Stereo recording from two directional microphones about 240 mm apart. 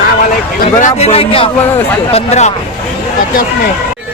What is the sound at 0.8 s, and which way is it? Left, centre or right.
Speech, left.